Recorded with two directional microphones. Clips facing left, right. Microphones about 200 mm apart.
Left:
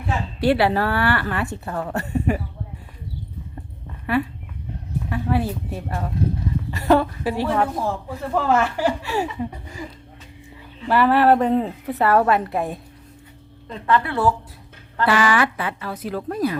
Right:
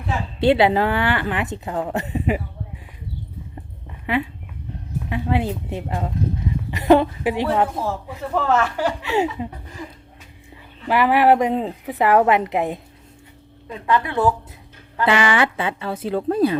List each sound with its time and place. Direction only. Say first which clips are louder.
0.3 s a woman's voice: right 3 dB; 20° right (ahead or behind)
4.1 s a woman's voice: left 1 dB; 20° right (ahead or behind)
8.4 s speech: even; 10° left (ahead or behind)
9.0 s a woman's voice: right 3 dB; 20° right (ahead or behind)
10.8 s a woman's voice: even; 15° right (ahead or behind)